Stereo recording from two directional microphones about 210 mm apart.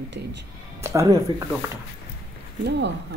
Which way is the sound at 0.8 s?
15° right (ahead or behind).